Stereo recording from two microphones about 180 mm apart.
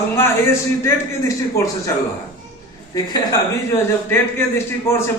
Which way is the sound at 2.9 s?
20° left (ahead or behind).